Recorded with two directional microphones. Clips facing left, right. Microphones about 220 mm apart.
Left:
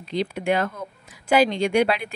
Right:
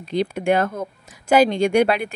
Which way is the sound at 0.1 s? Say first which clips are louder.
Right 4 dB; 50° right (ahead or behind).